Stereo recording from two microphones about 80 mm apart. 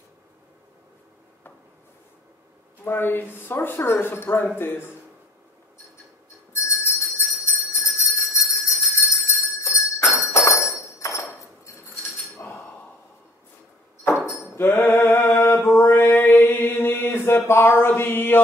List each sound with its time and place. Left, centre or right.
2.8 s speech: left
6.5 s bell: left
10.2 s a sound: left
10.9 s ping: left
12.4 s chink: left
14.2 s cutlery: centre
14.9 s mantra: left